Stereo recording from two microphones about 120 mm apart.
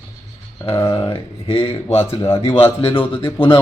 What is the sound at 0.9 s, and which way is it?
Speech, 45° left (ahead or behind).